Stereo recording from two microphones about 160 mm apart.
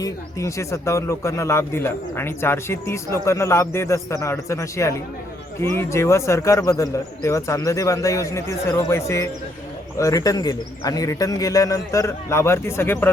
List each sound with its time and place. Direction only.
0.0 s speech: 20° left (ahead or behind)